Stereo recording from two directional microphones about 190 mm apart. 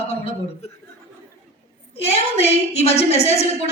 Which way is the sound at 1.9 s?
35° left (ahead or behind).